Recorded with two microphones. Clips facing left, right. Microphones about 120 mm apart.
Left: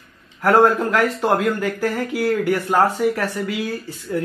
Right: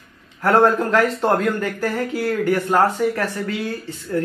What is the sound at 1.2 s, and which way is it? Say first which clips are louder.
Speech: left 1 dB; centre (ahead or behind).